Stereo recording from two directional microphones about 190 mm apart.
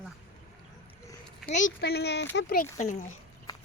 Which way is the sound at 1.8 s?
60° left (ahead or behind).